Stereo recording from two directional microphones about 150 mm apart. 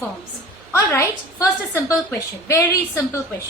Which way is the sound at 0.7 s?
20° left (ahead or behind).